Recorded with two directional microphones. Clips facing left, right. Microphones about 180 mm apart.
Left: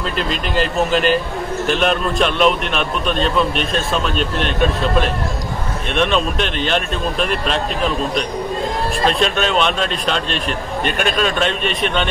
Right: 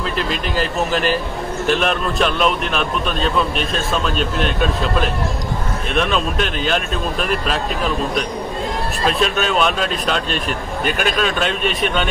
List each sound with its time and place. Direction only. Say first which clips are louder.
0.3 s a man's voice: left 1 dB; centre (ahead or behind)
5.9 s a man's voice: left 2 dB; centre (ahead or behind)
9.0 s a man's voice: even; 5° right (ahead or behind)